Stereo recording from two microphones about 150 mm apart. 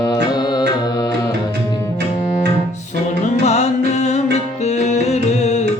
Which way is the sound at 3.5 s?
45° left (ahead or behind).